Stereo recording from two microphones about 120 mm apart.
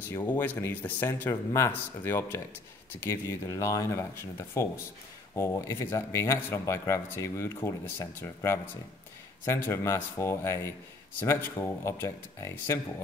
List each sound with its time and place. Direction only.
0.3 s speech: 15° left (ahead or behind)